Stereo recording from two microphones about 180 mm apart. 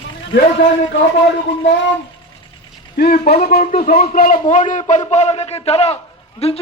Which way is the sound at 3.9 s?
55° left (ahead or behind).